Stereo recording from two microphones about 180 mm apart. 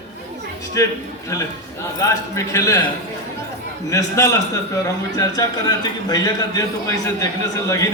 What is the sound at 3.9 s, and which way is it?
A man's voice, 15° left (ahead or behind).